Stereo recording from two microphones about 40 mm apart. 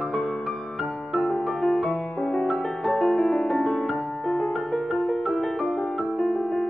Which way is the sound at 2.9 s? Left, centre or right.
Centre.